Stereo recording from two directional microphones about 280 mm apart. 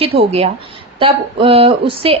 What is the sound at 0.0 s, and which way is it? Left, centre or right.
A woman's voice, right.